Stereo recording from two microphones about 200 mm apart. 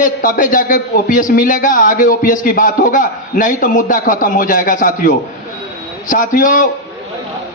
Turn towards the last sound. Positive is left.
turn(degrees=40)  # may be behind; listen again after turning